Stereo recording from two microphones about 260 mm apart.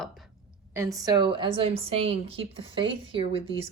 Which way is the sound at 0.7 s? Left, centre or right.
Centre.